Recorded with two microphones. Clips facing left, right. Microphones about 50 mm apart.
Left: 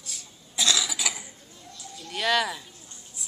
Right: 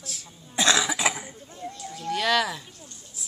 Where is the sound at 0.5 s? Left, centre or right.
Right.